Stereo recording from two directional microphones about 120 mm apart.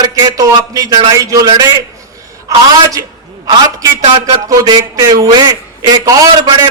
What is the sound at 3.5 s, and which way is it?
A man's voice, 35° right (ahead or behind).